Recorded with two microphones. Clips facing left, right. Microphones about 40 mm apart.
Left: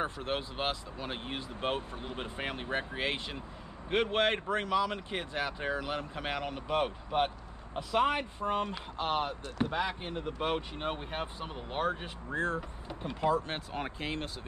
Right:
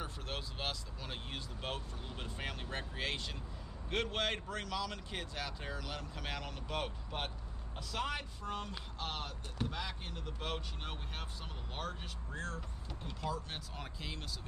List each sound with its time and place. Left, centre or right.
0.0 s speech: left